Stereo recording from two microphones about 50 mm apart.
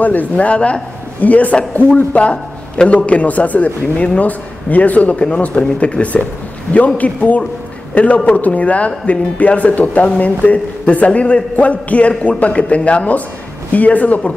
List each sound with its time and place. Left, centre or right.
0.0 s a man's voice: left